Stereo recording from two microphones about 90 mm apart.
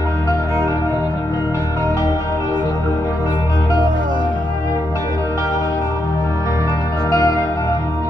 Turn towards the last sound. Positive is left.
turn(degrees=40)  # may be behind; listen again after turning